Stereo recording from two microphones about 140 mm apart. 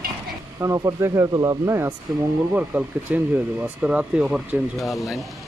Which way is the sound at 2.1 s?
5° right (ahead or behind).